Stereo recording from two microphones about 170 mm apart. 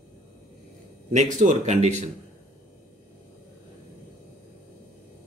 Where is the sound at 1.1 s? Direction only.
45° right (ahead or behind).